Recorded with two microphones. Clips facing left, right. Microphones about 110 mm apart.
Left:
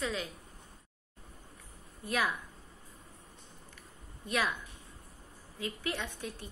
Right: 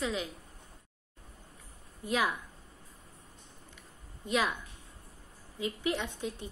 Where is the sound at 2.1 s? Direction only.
15° right (ahead or behind).